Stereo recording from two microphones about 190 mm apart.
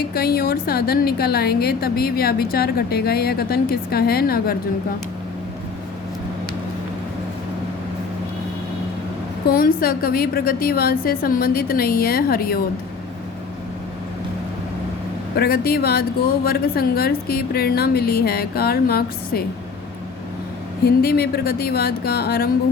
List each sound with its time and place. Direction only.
0.1 s a woman's voice: 55° left (ahead or behind)
9.5 s a woman's voice: 50° left (ahead or behind)
15.4 s a woman's voice: 55° left (ahead or behind)
20.8 s speech: 55° left (ahead or behind)